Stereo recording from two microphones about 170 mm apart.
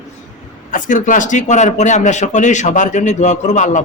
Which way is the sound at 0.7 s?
50° left (ahead or behind).